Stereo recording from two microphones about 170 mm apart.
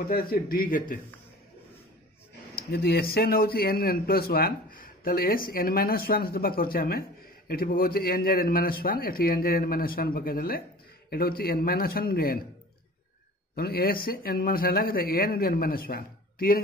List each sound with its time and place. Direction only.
0.0 s speech: 60° left (ahead or behind)
2.5 s speech: 65° left (ahead or behind)
13.6 s speech: 65° left (ahead or behind)